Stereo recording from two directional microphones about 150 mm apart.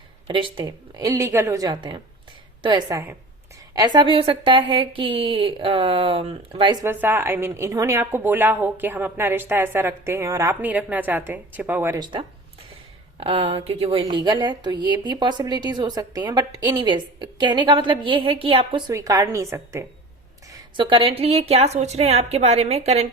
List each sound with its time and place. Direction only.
0.3 s a woman's voice: 35° right (ahead or behind)
6.8 s a woman's voice: 15° right (ahead or behind)
11.9 s a woman's voice: 30° right (ahead or behind)
14.0 s a woman's voice: 30° right (ahead or behind)
18.9 s a woman's voice: 25° right (ahead or behind)
20.5 s a woman's voice: 35° right (ahead or behind)